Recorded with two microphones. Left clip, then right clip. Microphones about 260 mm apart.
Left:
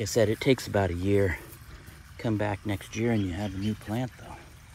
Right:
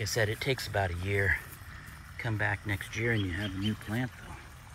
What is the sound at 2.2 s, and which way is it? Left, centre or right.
Speech, centre.